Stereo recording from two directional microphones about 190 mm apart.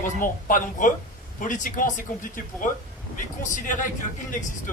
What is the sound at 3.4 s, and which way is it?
Speech, 45° left (ahead or behind).